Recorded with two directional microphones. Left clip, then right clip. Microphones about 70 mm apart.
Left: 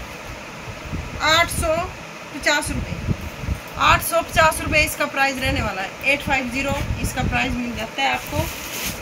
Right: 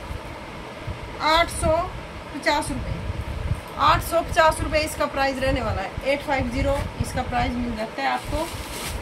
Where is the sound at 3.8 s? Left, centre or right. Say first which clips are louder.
Left 2 dB; right.